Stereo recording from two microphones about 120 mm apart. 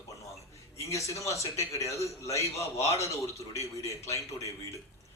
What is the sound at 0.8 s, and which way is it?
Speech, 25° left (ahead or behind).